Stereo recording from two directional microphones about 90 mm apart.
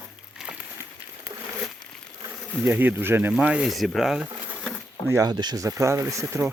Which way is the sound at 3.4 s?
10° right (ahead or behind).